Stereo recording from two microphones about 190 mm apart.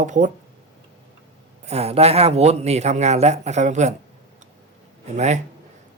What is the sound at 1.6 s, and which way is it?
Speech, 35° right (ahead or behind).